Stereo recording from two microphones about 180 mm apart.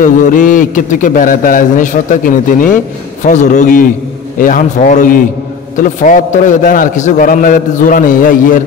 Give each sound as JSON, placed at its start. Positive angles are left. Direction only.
{"t": 0.0, "sound": "a man's voice", "side_deg": 45}